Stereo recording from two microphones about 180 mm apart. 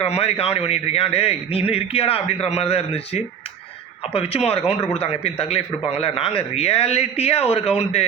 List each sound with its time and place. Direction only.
0.0 s a man's voice: 35° left (ahead or behind)